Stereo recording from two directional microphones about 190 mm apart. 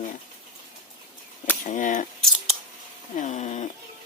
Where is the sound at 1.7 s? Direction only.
40° left (ahead or behind).